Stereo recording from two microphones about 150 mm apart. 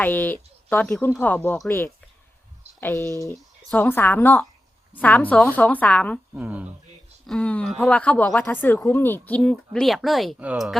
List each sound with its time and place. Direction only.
0.0 s a woman's voice: 10° left (ahead or behind)
6.3 s speech: 10° right (ahead or behind)
7.3 s speech: 5° left (ahead or behind)